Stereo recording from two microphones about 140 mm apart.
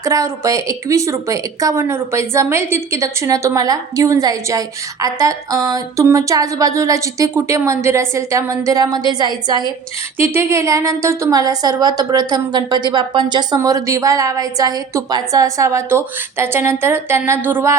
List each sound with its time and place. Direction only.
0.0 s a woman's voice: 20° right (ahead or behind)
10.2 s a woman's voice: 20° right (ahead or behind)